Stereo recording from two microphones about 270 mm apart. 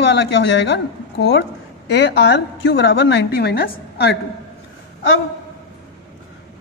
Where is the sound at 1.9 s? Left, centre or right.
Left.